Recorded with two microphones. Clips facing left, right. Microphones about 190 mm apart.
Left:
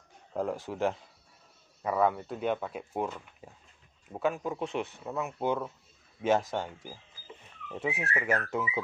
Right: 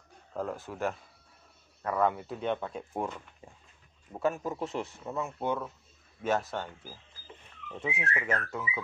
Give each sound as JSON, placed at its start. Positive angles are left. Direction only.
{"t": 0.3, "sound": "a man's voice", "side_deg": 15}
{"t": 5.2, "sound": "speech", "side_deg": 10}
{"t": 8.5, "sound": "speech", "side_deg": 25}